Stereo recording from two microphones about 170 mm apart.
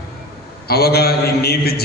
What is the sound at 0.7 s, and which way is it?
A man's voice, 65° left (ahead or behind).